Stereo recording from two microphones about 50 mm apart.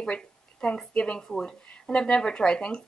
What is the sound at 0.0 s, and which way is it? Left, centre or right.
A woman's voice, centre.